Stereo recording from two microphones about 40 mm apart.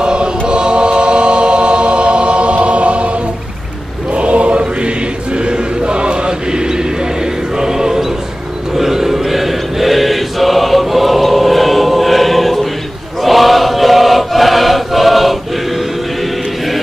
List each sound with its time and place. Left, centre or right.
0.0 s choir: right
4.1 s chant: right
7.5 s choir: centre